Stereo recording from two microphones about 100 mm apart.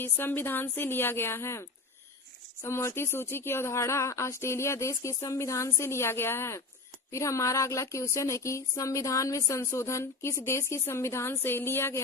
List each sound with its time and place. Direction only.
0.0 s speech: 20° left (ahead or behind)